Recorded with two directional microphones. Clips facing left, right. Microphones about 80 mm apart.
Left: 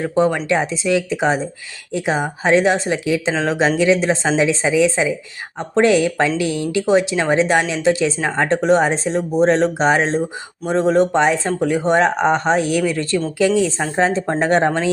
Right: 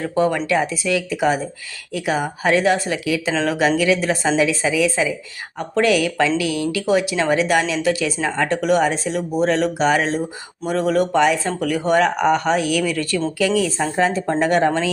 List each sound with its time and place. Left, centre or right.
0.0 s speech: left